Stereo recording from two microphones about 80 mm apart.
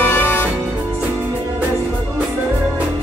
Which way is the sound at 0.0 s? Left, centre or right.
Left.